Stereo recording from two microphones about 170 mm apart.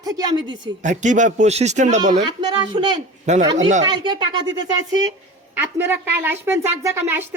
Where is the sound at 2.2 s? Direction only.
25° right (ahead or behind).